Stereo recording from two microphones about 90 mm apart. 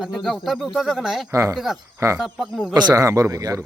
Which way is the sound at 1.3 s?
35° right (ahead or behind).